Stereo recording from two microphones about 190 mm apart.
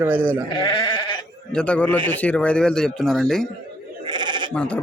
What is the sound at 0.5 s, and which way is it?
Sheep, 25° left (ahead or behind).